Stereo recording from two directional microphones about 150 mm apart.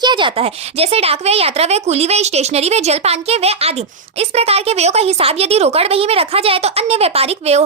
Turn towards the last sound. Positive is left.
turn(degrees=-45)  # may be behind; listen again after turning